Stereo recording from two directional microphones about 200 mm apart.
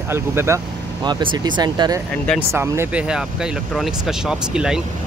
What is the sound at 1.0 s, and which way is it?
Speech, 25° right (ahead or behind).